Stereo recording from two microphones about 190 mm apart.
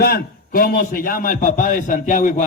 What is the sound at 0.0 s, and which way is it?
A man's voice, 50° left (ahead or behind).